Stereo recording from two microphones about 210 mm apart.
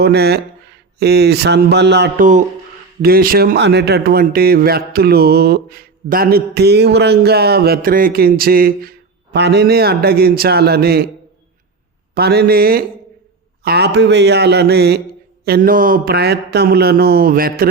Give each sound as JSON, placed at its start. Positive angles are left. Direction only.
{"t": 0.0, "sound": "a man's voice", "side_deg": -50}
{"t": 12.1, "sound": "a man's voice", "side_deg": -50}